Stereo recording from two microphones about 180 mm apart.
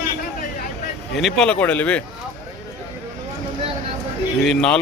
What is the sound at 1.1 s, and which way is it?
Speech, centre (ahead or behind).